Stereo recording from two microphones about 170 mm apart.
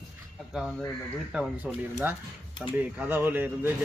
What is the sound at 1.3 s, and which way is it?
Speech, 5° right (ahead or behind).